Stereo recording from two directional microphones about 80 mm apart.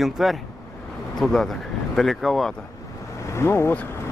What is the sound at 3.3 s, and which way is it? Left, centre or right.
Speech, left.